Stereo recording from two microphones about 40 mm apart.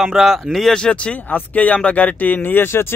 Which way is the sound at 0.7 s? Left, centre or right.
Left.